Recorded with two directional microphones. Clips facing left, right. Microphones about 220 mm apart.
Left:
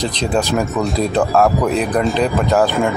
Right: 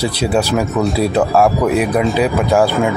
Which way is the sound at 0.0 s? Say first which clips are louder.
Right 2 dB; 10° right (ahead or behind).